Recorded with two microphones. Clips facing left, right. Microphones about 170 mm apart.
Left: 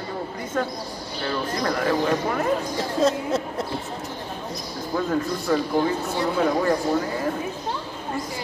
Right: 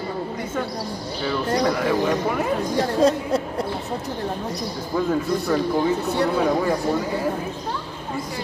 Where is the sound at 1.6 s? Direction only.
5° right (ahead or behind).